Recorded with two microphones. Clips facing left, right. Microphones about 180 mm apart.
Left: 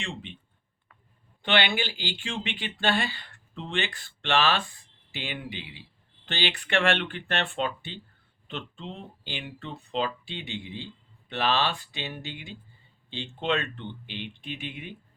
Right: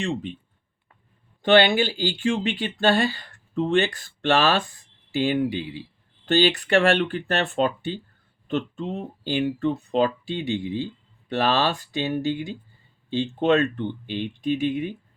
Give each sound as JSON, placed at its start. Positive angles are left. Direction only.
{"t": 0.0, "sound": "speech", "side_deg": -40}
{"t": 1.4, "sound": "speech", "side_deg": -40}